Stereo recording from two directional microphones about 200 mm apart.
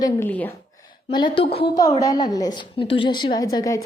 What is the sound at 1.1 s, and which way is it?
A woman's voice, 25° left (ahead or behind).